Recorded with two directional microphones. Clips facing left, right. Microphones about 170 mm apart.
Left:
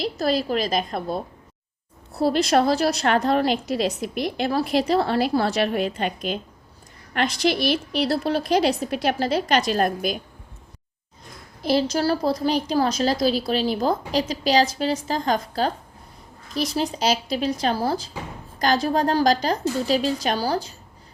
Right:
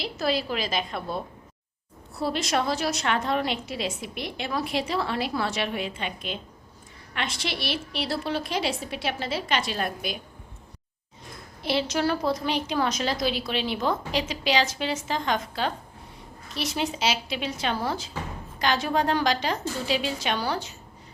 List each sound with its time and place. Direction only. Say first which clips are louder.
0.0 s a woman's voice: left 4 dB; 40° left (ahead or behind)
11.6 s a woman's voice: left 4 dB; 40° left (ahead or behind)